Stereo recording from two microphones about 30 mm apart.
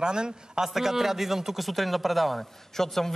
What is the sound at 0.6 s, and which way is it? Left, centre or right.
Speech, centre.